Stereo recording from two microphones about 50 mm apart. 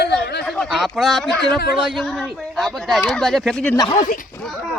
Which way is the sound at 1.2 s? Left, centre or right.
Centre.